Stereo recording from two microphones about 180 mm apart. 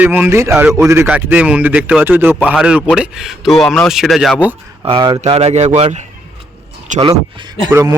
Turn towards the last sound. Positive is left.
turn(degrees=-15)  # may be behind; listen again after turning